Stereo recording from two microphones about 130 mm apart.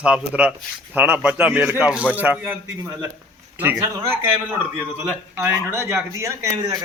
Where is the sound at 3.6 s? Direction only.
15° right (ahead or behind).